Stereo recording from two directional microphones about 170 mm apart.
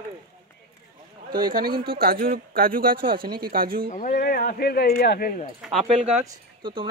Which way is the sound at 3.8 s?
50° left (ahead or behind).